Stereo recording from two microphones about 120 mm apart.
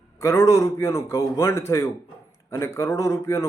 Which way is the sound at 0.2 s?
25° left (ahead or behind).